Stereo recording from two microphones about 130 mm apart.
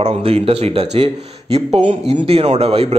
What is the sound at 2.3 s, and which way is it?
Speech, 50° right (ahead or behind).